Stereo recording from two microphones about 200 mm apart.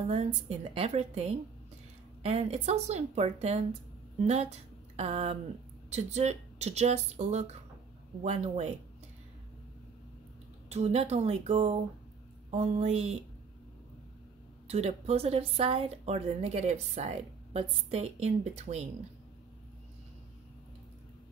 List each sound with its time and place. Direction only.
0.1 s a woman's voice: 35° right (ahead or behind)
10.7 s a woman's voice: 35° right (ahead or behind)
14.7 s a woman's voice: 30° right (ahead or behind)